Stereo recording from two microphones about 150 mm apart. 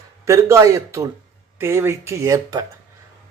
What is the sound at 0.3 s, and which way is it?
A man's voice, 20° right (ahead or behind).